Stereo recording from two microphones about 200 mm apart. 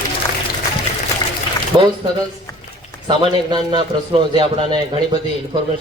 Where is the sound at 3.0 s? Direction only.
20° right (ahead or behind).